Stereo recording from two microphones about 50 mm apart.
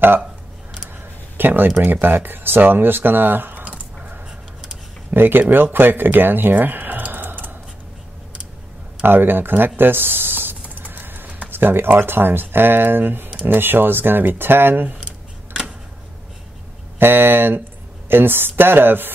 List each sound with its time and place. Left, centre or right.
1.4 s speech: right
3.6 s a sound: right
5.1 s speech: right
9.0 s speech: right
9.8 s typing: right
11.2 s a sound: right
11.5 s speech: right
17.0 s speech: right